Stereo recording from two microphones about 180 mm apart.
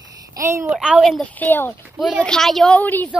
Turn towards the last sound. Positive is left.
turn(degrees=10)  # may be behind; listen again after turning